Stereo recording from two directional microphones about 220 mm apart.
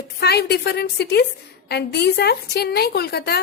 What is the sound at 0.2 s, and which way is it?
A woman's voice, 45° left (ahead or behind).